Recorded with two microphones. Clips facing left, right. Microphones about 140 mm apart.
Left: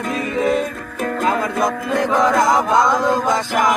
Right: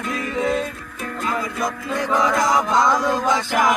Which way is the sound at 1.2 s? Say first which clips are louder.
Left 5 dB; 50° left (ahead or behind).